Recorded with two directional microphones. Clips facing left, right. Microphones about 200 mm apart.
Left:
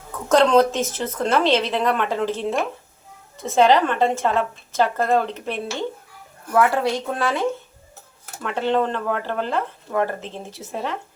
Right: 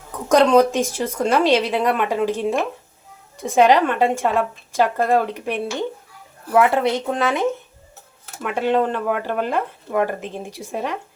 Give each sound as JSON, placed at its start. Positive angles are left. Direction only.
{"t": 0.3, "sound": "a woman's voice", "side_deg": -15}